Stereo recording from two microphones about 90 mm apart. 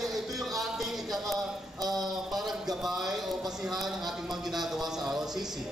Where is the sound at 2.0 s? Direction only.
Centre (ahead or behind).